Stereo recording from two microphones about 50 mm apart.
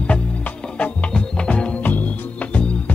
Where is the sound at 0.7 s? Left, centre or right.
Left.